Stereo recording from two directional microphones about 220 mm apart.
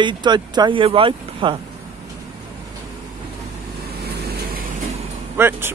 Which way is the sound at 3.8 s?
45° right (ahead or behind).